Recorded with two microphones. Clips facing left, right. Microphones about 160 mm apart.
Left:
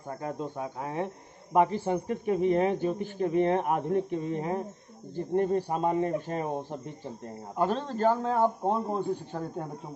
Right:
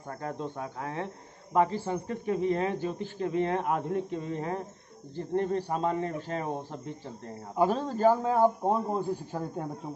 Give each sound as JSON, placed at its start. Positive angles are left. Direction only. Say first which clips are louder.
{"t": 0.2, "sound": "speech", "louder": "left 1 dB", "side_deg": 15}
{"t": 7.5, "sound": "a man's voice", "louder": "right 2 dB", "side_deg": -5}